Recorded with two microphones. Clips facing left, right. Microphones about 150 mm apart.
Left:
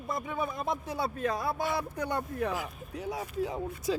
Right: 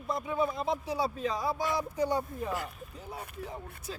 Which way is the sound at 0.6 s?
55° left (ahead or behind).